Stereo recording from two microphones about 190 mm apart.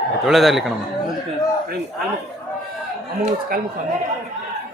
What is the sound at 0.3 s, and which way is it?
Speech, centre (ahead or behind).